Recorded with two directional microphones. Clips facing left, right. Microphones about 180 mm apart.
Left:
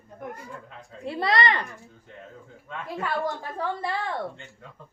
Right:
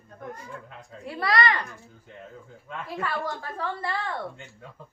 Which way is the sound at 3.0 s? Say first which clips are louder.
Left 3 dB; 15° left (ahead or behind).